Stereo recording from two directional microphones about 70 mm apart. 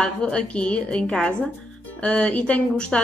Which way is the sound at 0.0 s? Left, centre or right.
Centre.